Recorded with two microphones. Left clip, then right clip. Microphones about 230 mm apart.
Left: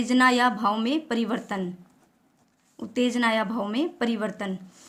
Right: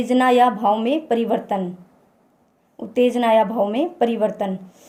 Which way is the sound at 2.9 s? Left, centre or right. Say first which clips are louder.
Right 8 dB; left.